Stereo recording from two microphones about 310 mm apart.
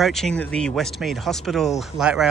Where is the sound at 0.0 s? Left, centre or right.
Centre.